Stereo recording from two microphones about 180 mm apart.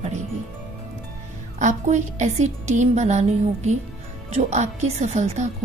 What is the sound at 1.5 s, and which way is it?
A woman's voice, 40° right (ahead or behind).